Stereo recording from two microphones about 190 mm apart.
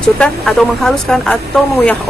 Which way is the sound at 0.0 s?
5° left (ahead or behind).